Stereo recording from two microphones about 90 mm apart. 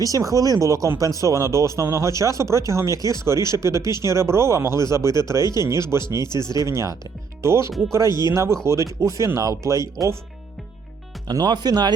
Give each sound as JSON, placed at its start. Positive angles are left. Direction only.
{"t": 0.0, "sound": "speech", "side_deg": -40}
{"t": 6.1, "sound": "speech", "side_deg": 55}
{"t": 6.4, "sound": "speech", "side_deg": -35}
{"t": 7.7, "sound": "speech", "side_deg": 0}
{"t": 8.0, "sound": "speech", "side_deg": 55}
{"t": 8.3, "sound": "speech", "side_deg": -35}
{"t": 11.3, "sound": "speech", "side_deg": -50}